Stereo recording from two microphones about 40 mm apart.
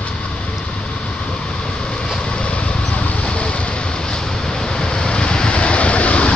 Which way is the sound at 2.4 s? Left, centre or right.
Left.